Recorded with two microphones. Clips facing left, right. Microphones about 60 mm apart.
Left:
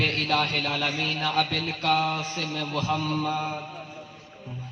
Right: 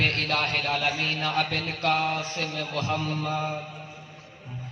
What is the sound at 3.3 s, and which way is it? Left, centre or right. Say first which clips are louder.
Mantra: even; centre.